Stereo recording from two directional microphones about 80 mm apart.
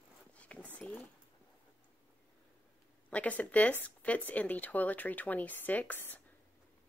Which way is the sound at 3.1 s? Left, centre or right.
Centre.